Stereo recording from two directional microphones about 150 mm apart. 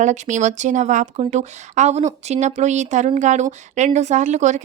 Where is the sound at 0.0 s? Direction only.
55° right (ahead or behind).